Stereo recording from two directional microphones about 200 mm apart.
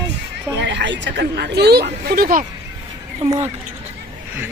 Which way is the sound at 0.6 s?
60° right (ahead or behind).